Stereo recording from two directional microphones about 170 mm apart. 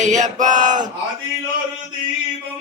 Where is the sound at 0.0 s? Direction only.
45° right (ahead or behind).